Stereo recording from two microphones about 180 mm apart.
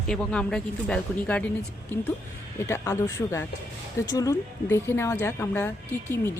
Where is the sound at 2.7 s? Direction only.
15° left (ahead or behind).